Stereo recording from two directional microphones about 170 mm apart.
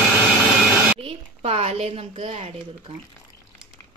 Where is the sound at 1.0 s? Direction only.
35° right (ahead or behind).